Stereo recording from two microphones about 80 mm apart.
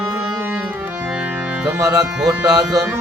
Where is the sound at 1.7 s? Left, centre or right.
Right.